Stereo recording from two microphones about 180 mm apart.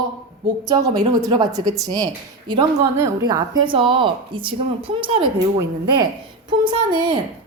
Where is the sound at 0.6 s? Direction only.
25° right (ahead or behind).